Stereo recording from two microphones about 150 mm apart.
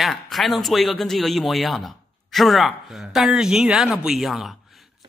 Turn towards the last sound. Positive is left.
turn(degrees=0)  # may be behind; listen again after turning